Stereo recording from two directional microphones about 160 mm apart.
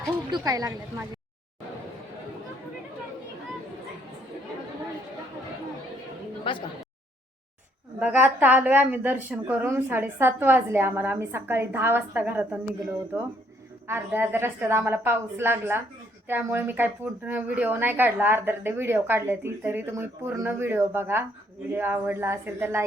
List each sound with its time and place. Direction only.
0.3 s speech: 25° right (ahead or behind)
6.5 s speech: 30° left (ahead or behind)
7.9 s a woman's voice: 10° right (ahead or behind)